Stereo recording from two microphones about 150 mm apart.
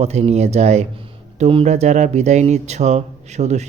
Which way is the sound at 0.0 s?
45° right (ahead or behind).